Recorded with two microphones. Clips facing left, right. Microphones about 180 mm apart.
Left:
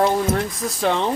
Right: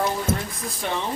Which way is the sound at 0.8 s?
90° left.